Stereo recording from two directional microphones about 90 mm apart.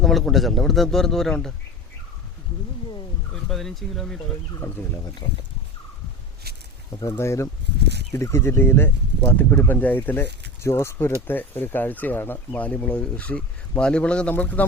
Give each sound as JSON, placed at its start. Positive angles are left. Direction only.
{"t": 0.0, "sound": "a man's voice", "side_deg": 0}
{"t": 3.5, "sound": "a man's voice", "side_deg": 5}
{"t": 4.6, "sound": "speech", "side_deg": 25}
{"t": 7.2, "sound": "speech", "side_deg": 35}